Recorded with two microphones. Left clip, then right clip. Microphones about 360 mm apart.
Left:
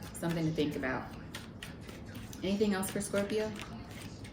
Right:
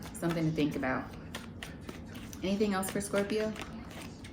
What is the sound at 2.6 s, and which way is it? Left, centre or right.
Speech, centre.